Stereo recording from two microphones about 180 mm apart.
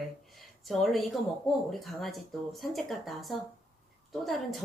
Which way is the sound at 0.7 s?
Centre (ahead or behind).